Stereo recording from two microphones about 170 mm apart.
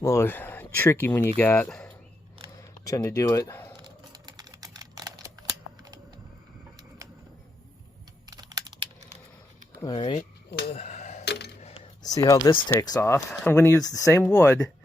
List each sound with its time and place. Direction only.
0.0 s speech: 15° left (ahead or behind)
2.6 s speech: 20° left (ahead or behind)
3.8 s camera: 25° right (ahead or behind)
8.3 s computer keyboard: 20° right (ahead or behind)
9.0 s a sound: 40° right (ahead or behind)
9.8 s speech: 30° left (ahead or behind)
10.5 s a sound: 75° left (ahead or behind)
10.8 s a sound: 40° left (ahead or behind)
11.3 s coin: 75° left (ahead or behind)
12.0 s speech: 20° left (ahead or behind)
14.1 s speech: 5° left (ahead or behind)